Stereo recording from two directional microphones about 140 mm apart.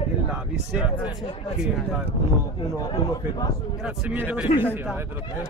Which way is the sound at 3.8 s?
10° right (ahead or behind).